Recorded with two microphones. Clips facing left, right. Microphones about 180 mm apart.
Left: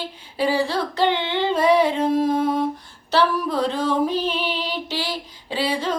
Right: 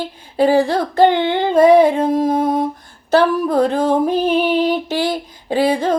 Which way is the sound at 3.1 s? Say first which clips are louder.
Right 6 dB; 50° right (ahead or behind).